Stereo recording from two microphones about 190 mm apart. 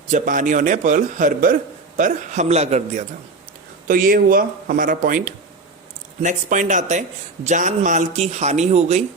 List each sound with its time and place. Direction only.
0.1 s a man's voice: 45° right (ahead or behind)
3.8 s a man's voice: 50° right (ahead or behind)